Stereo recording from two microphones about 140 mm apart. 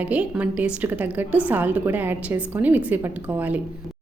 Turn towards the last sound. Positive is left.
turn(degrees=-10)  # may be behind; listen again after turning